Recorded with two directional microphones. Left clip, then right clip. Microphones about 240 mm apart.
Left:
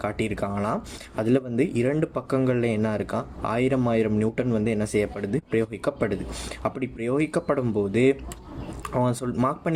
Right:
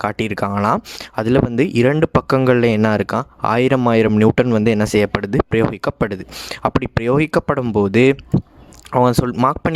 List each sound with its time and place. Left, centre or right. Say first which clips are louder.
0.0 s speech: right 8 dB; right